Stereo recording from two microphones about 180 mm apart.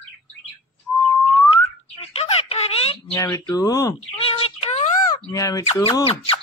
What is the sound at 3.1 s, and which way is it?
Speech, 15° left (ahead or behind).